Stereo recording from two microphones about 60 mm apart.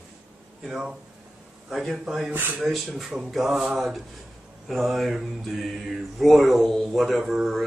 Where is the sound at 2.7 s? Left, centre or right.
Centre.